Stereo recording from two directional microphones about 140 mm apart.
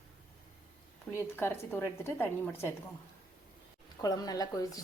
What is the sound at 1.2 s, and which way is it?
A woman's voice, 15° left (ahead or behind).